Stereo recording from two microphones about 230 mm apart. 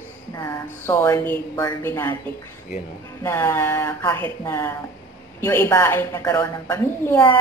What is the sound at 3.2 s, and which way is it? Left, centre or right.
Speech, centre.